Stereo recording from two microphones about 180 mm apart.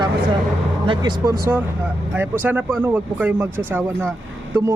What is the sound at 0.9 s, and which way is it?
Speech, 20° right (ahead or behind).